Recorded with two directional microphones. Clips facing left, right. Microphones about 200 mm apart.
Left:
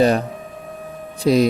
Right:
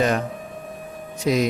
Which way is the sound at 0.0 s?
35° left (ahead or behind).